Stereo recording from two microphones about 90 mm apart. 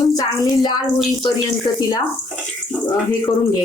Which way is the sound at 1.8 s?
40° left (ahead or behind).